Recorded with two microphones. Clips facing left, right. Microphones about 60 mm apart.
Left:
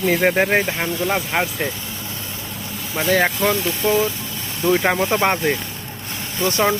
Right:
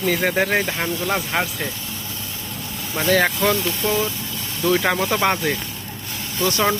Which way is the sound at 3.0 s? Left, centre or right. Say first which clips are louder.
Even; centre.